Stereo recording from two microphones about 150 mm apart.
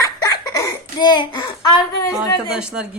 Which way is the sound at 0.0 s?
25° left (ahead or behind).